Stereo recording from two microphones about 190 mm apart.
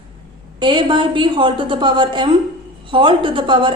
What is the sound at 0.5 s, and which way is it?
A woman's voice, 25° right (ahead or behind).